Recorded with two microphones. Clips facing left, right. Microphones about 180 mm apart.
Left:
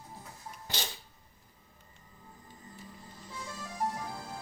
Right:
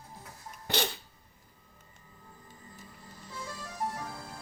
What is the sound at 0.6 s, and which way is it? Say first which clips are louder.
Dog: right 9 dB; 65° right (ahead or behind).